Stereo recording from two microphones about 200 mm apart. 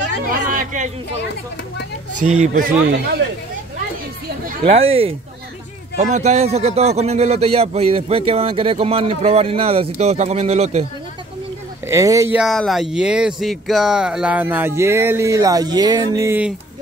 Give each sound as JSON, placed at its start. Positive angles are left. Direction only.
{"t": 0.3, "sound": "speech", "side_deg": -40}
{"t": 2.2, "sound": "speech", "side_deg": -35}
{"t": 4.5, "sound": "speech", "side_deg": -30}
{"t": 11.9, "sound": "speech", "side_deg": -15}
{"t": 12.4, "sound": "speech", "side_deg": 0}